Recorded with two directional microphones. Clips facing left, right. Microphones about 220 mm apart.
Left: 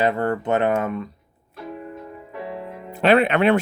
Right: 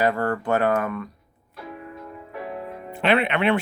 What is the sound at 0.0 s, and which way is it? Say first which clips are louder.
Speech: left 2 dB; 20° left (ahead or behind).